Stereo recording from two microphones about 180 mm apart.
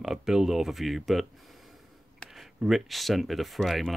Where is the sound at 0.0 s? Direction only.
5° right (ahead or behind).